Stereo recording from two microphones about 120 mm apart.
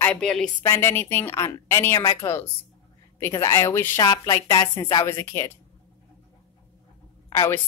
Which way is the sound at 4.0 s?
35° left (ahead or behind).